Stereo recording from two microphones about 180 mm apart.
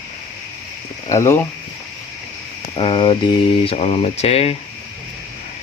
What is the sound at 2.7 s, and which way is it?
Speech, 30° left (ahead or behind).